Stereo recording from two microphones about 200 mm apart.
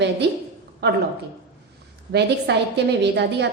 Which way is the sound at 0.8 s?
55° right (ahead or behind).